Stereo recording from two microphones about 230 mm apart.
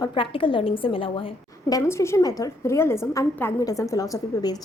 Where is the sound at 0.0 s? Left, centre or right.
Left.